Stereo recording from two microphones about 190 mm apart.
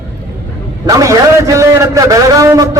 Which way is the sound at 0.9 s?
20° right (ahead or behind).